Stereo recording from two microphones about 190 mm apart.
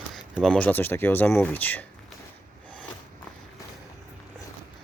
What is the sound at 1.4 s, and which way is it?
Speech, 10° left (ahead or behind).